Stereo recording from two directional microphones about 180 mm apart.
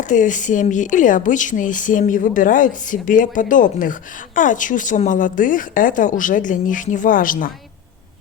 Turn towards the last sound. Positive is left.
turn(degrees=50)  # may be behind; listen again after turning